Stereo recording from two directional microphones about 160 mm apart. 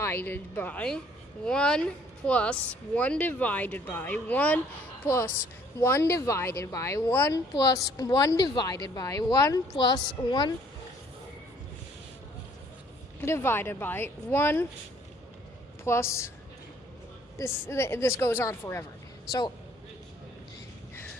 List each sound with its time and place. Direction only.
0.0 s speech: 15° left (ahead or behind)
13.2 s speech: 15° left (ahead or behind)
15.8 s speech: 15° left (ahead or behind)
17.3 s speech: 15° left (ahead or behind)